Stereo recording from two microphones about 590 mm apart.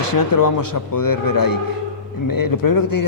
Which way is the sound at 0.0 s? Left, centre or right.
Left.